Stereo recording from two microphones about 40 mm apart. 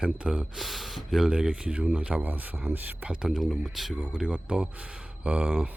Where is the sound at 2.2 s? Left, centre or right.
Right.